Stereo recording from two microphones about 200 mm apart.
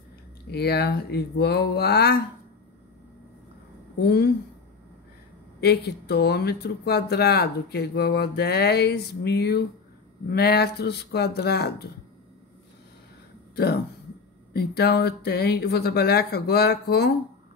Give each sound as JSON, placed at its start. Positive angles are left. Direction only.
{"t": 0.5, "sound": "speech", "side_deg": 55}
{"t": 4.0, "sound": "speech", "side_deg": 55}
{"t": 5.6, "sound": "speech", "side_deg": 55}
{"t": 14.5, "sound": "speech", "side_deg": 50}